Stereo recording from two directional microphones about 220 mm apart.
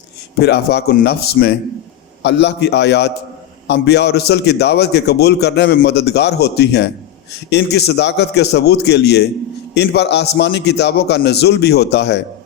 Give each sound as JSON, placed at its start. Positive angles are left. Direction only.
{"t": 0.3, "sound": "a man's voice", "side_deg": 50}